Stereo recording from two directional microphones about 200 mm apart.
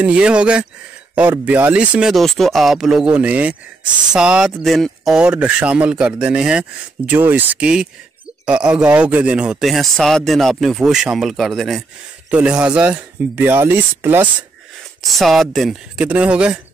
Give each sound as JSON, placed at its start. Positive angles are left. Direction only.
{"t": 0.0, "sound": "speech", "side_deg": -5}
{"t": 15.0, "sound": "speech", "side_deg": 0}